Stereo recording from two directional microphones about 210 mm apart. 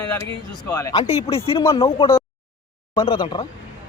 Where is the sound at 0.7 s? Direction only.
10° left (ahead or behind).